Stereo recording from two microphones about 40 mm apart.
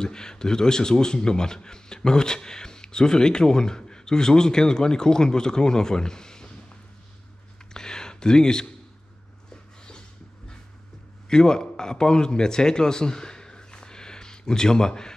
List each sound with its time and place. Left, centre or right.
0.0 s a man's voice: centre
7.7 s a sound: centre
11.2 s a man's voice: centre